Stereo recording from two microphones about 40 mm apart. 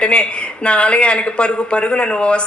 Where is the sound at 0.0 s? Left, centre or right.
Left.